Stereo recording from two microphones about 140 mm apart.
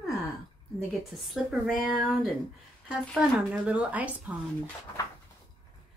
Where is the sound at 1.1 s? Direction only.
Centre (ahead or behind).